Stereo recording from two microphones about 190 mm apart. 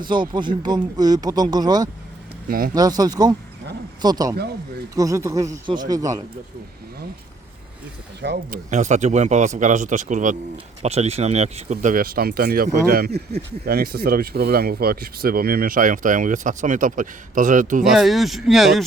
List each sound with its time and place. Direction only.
0.0 s speech: 25° right (ahead or behind)
2.5 s speech: 50° right (ahead or behind)
2.7 s speech: 20° right (ahead or behind)
8.2 s speech: 55° right (ahead or behind)
17.9 s speech: centre (ahead or behind)